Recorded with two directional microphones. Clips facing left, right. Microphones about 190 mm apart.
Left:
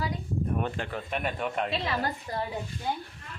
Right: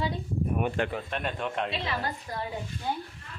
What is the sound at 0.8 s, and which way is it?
Speech, 60° right (ahead or behind).